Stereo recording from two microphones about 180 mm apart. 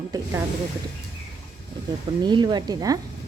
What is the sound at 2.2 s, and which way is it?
Speech, 25° right (ahead or behind).